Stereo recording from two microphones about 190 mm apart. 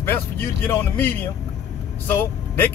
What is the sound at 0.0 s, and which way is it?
A man's voice, 10° left (ahead or behind).